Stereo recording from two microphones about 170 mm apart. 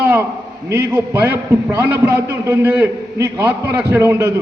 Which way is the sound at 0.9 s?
15° right (ahead or behind).